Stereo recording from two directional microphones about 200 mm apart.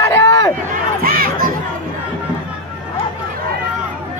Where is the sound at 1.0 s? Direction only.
45° right (ahead or behind).